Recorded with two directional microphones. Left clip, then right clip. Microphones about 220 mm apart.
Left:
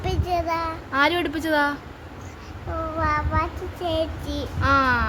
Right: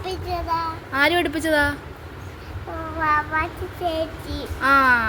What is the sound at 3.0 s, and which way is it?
Speech, 5° left (ahead or behind).